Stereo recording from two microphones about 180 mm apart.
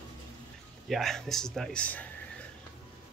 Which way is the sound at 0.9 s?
Centre (ahead or behind).